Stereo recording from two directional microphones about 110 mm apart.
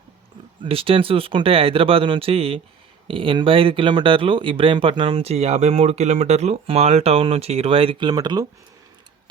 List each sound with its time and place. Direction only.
0.6 s speech: 60° right (ahead or behind); by 6.6 s 90° right
6.7 s speech: 70° right (ahead or behind); by 8.4 s 40° right (ahead or behind)